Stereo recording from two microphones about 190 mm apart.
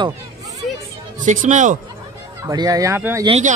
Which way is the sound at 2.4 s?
20° right (ahead or behind).